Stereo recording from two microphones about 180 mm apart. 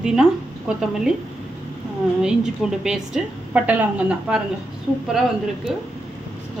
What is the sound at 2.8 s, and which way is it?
A woman's voice, 5° right (ahead or behind).